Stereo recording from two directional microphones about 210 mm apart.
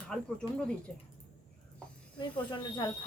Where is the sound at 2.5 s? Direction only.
20° left (ahead or behind).